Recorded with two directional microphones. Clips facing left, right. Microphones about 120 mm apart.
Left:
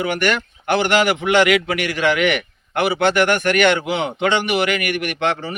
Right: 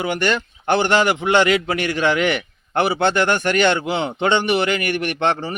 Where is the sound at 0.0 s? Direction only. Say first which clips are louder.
Left 1 dB; 25° right (ahead or behind).